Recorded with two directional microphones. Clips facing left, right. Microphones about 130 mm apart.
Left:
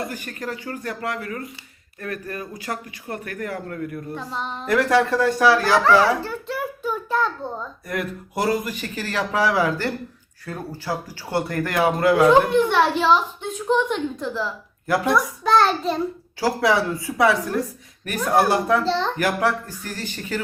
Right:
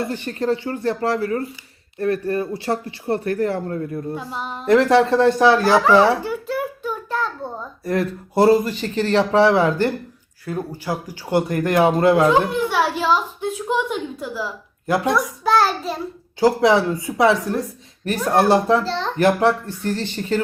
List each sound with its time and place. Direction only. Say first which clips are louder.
0.0 s speech: right 7 dB; 30° right (ahead or behind)
4.1 s a child's voice: right 1 dB; 5° right (ahead or behind)
4.6 s speech: right 5 dB; 25° right (ahead or behind)
6.3 s child singing: right 4 dB; centre (ahead or behind)
7.9 s speech: right 7 dB; 30° right (ahead or behind)
12.3 s a child's voice: left 2 dB; 5° right (ahead or behind)
14.8 s a child's voice: right 2 dB; 20° right (ahead or behind)
15.1 s a child's voice: left 2 dB; 5° right (ahead or behind)
16.4 s speech: right 5 dB; 20° right (ahead or behind)
18.9 s a child's voice: left 2 dB; centre (ahead or behind)
19.1 s speech: right 5 dB; 25° right (ahead or behind)